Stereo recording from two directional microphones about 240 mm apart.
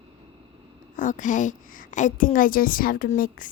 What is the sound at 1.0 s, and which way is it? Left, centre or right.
A woman's voice, left.